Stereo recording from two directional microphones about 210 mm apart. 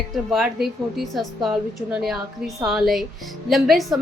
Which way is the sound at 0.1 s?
Centre (ahead or behind).